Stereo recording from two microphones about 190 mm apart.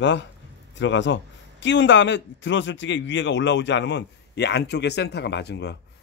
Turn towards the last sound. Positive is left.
turn(degrees=60)  # may be behind; listen again after turning